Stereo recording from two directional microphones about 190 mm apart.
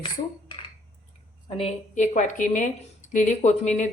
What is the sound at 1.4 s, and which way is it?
A woman's voice, 30° left (ahead or behind).